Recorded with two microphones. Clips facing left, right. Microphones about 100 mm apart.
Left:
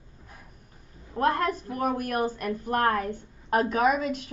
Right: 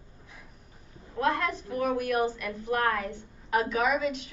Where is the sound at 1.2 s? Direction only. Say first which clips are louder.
Left 3 dB; 45° left (ahead or behind).